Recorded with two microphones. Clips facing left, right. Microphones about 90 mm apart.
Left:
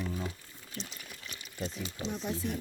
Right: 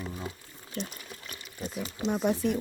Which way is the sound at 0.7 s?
50° right (ahead or behind).